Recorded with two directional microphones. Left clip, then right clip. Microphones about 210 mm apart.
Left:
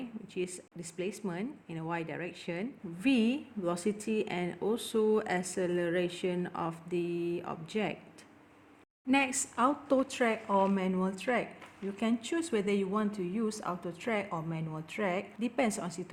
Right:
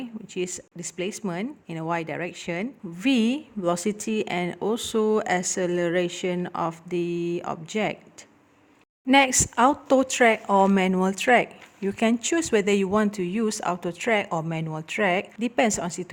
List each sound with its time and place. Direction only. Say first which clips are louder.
0.3 s speech: right 7 dB; 25° right (ahead or behind)
9.0 s speech: right 11 dB; 30° right (ahead or behind)